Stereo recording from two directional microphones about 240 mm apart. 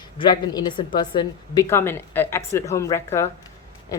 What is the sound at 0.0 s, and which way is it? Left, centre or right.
Speech, centre.